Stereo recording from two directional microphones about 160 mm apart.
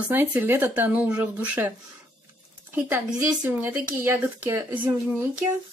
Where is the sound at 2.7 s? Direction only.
10° right (ahead or behind).